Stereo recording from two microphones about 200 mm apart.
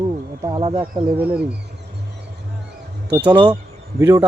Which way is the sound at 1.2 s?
10° right (ahead or behind).